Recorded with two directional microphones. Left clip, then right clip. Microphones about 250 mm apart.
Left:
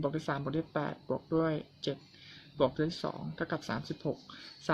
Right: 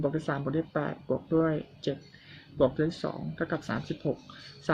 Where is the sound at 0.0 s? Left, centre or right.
Centre.